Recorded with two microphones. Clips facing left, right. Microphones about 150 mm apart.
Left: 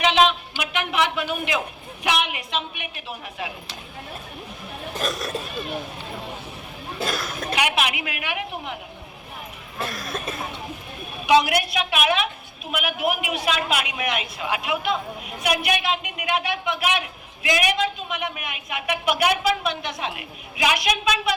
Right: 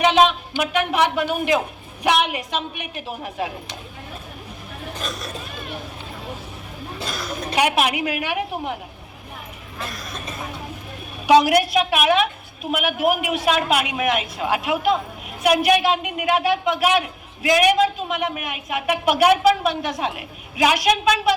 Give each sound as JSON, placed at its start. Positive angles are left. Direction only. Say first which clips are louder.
{"t": 0.6, "sound": "a man's voice", "louder": "right 4 dB", "side_deg": -45}
{"t": 4.9, "sound": "speech", "louder": "left 5 dB", "side_deg": 45}
{"t": 7.0, "sound": "speech", "louder": "left 4 dB", "side_deg": 50}
{"t": 7.5, "sound": "a woman's voice", "louder": "right 5 dB", "side_deg": -40}
{"t": 9.8, "sound": "speech", "louder": "left 3 dB", "side_deg": 50}
{"t": 11.3, "sound": "a woman's voice", "louder": "right 4 dB", "side_deg": -40}